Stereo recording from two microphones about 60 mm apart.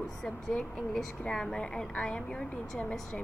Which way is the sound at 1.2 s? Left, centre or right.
Centre.